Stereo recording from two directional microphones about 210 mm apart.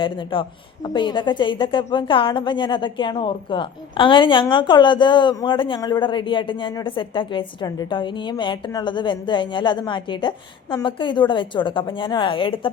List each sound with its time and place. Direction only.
0.0 s a woman's voice: 25° left (ahead or behind)